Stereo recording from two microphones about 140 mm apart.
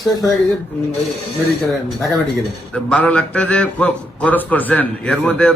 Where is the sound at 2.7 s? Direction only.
10° left (ahead or behind).